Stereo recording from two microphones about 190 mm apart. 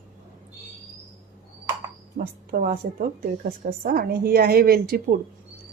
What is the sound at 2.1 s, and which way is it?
A woman's voice, 50° right (ahead or behind).